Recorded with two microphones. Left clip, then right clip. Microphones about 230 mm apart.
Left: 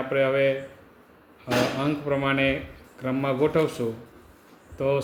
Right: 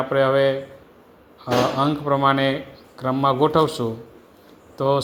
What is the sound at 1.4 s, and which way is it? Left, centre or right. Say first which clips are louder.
Speech: right 5 dB; right.